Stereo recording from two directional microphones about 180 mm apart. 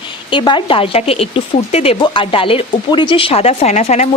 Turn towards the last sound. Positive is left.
turn(degrees=40)  # may be behind; listen again after turning